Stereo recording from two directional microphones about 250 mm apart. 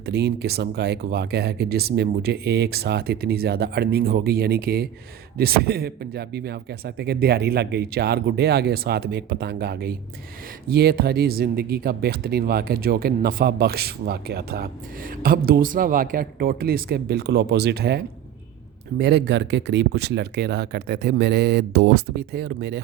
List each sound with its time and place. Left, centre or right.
0.0 s speech: right